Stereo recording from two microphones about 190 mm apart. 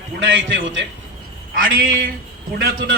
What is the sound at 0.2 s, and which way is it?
Speech, 90° right.